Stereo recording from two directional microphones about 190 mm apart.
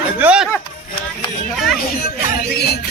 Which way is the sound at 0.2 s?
5° right (ahead or behind).